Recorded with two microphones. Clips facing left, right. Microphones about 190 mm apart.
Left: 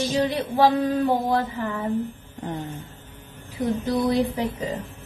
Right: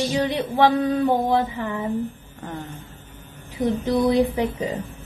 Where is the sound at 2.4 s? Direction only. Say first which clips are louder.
Left 2 dB; 15° left (ahead or behind).